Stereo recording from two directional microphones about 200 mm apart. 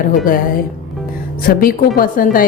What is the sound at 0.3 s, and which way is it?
Speech, 45° left (ahead or behind).